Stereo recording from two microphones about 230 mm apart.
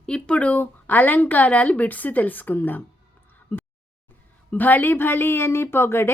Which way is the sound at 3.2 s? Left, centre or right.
Centre.